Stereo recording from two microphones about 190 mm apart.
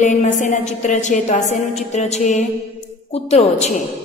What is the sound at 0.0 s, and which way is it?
A woman's voice, 40° left (ahead or behind).